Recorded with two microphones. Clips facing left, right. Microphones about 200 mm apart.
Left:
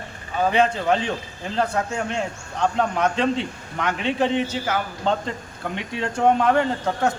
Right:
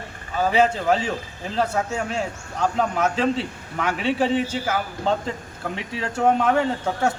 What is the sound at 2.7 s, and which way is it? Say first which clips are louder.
Speech: even; 5° right (ahead or behind).